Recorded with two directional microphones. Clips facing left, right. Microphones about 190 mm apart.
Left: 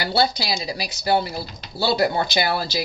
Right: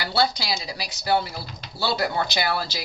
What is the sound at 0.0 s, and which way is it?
Speech, 25° left (ahead or behind).